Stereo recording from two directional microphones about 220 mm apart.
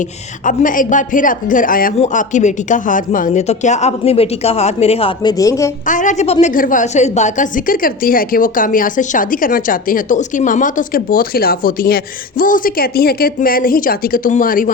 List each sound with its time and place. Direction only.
0.4 s a woman's voice: 35° left (ahead or behind); by 5.7 s 15° left (ahead or behind)
5.8 s a woman's voice: 35° left (ahead or behind)